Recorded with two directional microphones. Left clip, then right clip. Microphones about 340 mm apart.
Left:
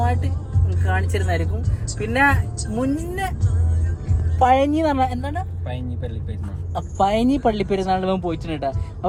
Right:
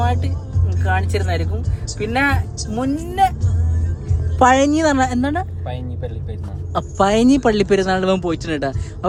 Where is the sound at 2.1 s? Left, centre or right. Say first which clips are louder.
Left 1 dB; centre.